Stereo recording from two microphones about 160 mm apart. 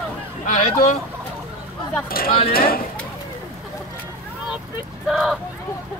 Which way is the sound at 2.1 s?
65° left (ahead or behind).